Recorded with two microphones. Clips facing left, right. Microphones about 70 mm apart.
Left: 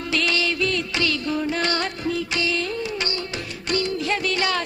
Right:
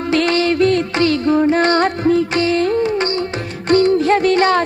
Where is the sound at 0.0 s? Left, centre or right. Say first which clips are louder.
Right 8 dB; right.